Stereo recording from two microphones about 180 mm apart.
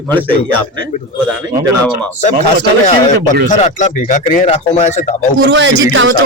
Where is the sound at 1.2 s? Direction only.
5° right (ahead or behind).